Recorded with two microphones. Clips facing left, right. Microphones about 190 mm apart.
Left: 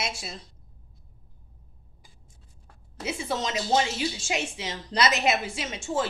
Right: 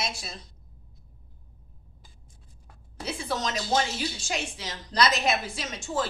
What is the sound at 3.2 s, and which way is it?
Speech, 25° left (ahead or behind).